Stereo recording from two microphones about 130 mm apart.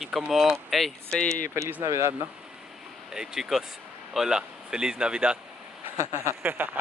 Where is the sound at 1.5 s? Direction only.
20° right (ahead or behind).